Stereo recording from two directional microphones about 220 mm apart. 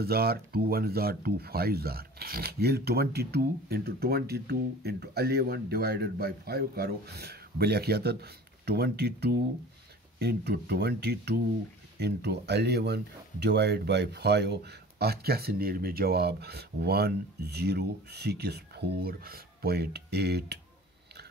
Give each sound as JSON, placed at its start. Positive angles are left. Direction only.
{"t": 0.0, "sound": "speech", "side_deg": -45}